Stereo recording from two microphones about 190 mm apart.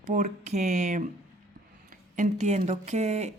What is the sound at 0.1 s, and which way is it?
Speech, 40° right (ahead or behind).